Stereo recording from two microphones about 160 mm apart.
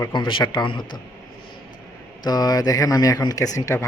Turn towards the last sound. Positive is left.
turn(degrees=15)  # may be behind; listen again after turning